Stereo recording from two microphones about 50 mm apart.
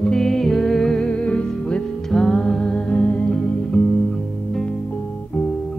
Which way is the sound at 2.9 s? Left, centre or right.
Left.